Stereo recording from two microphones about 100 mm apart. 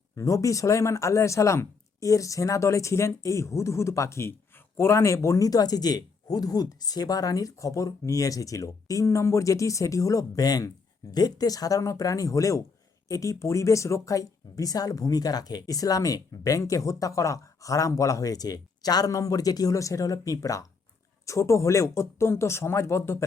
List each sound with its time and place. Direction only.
0.2 s speech: 30° left (ahead or behind)